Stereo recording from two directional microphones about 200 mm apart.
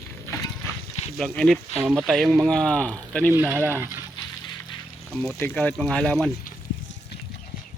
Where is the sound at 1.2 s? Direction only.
Centre (ahead or behind).